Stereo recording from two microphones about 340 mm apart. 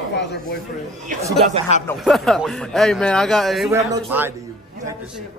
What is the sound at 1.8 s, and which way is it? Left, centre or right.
Speech, centre.